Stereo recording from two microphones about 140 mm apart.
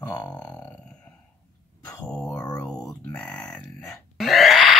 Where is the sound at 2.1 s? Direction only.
5° left (ahead or behind).